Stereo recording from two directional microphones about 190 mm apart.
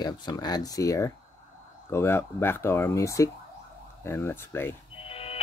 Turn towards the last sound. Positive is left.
turn(degrees=30)  # may be behind; listen again after turning